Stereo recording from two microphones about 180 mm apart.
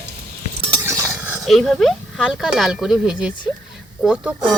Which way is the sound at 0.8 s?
15° right (ahead or behind).